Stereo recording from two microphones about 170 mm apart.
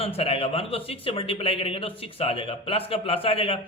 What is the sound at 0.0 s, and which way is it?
A man's voice, 35° left (ahead or behind).